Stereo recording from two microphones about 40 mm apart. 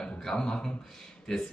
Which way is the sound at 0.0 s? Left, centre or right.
Centre.